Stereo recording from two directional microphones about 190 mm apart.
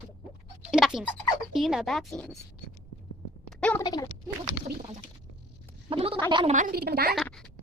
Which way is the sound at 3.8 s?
20° left (ahead or behind).